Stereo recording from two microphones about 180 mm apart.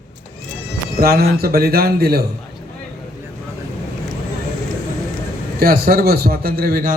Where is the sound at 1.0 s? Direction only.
60° right (ahead or behind).